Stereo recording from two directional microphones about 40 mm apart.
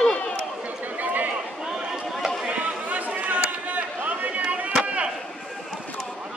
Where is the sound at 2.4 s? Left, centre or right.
Right.